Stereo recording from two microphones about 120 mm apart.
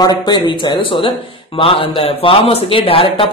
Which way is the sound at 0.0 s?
35° left (ahead or behind).